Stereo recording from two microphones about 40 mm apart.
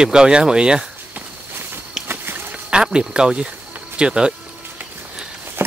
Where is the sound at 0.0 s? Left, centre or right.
Centre.